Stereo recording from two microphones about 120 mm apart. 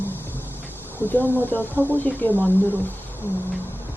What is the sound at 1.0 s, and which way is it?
Speech, 15° left (ahead or behind).